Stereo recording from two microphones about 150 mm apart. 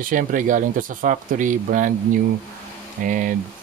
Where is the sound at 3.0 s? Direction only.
65° right (ahead or behind).